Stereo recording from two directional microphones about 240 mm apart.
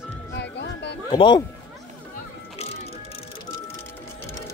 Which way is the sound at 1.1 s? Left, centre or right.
Centre.